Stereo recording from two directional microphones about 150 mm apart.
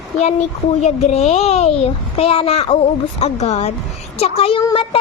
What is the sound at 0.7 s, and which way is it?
Speech, 50° left (ahead or behind).